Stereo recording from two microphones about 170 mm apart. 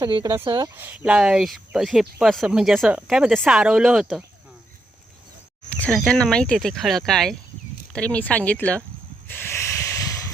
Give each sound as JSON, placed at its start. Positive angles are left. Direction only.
{"t": 0.0, "sound": "speech", "side_deg": -25}
{"t": 0.3, "sound": "speech", "side_deg": -15}
{"t": 0.8, "sound": "speech", "side_deg": -10}
{"t": 5.7, "sound": "speech", "side_deg": 5}
{"t": 9.2, "sound": "hiss", "side_deg": 10}